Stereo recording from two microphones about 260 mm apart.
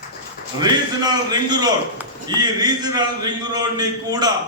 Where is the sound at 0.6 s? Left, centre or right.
Centre.